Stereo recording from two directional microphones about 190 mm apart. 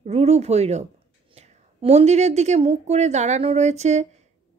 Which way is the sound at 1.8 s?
35° right (ahead or behind).